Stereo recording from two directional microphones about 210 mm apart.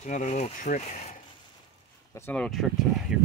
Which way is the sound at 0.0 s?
35° left (ahead or behind).